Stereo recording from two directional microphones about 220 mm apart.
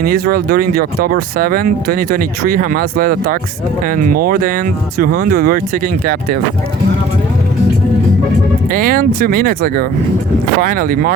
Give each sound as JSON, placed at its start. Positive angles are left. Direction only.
{"t": 0.0, "sound": "speech", "side_deg": -40}
{"t": 8.7, "sound": "speech", "side_deg": -40}